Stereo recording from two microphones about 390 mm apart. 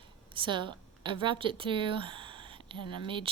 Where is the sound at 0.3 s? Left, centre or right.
Centre.